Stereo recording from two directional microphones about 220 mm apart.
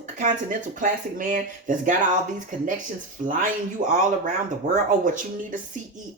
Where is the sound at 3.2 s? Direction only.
35° right (ahead or behind).